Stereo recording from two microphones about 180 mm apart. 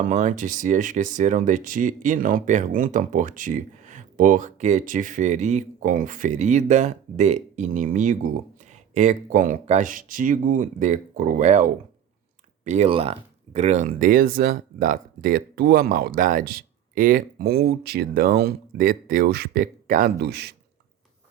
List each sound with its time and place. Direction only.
0.0 s speech: 45° right (ahead or behind)
20.2 s speech: 65° right (ahead or behind)